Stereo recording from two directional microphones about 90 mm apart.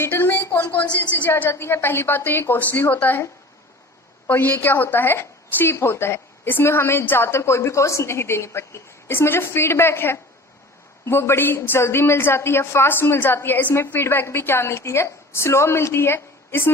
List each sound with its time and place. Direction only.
0.0 s a woman's voice: 25° left (ahead or behind)
4.3 s a woman's voice: 20° left (ahead or behind)